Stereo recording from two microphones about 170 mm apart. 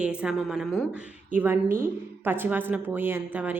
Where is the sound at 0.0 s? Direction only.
5° right (ahead or behind).